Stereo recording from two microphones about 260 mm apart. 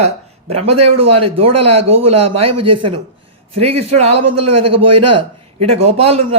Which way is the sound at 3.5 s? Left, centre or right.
Right.